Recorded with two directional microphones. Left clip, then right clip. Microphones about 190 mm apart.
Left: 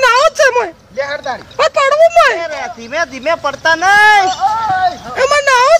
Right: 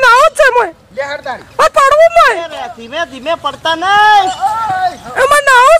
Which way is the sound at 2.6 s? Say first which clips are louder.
Left 1 dB; 25° left (ahead or behind).